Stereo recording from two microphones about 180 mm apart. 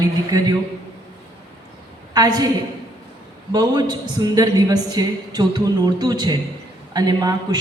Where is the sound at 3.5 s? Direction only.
20° right (ahead or behind).